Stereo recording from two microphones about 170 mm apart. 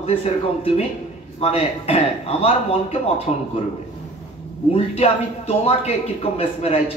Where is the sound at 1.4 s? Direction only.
35° left (ahead or behind).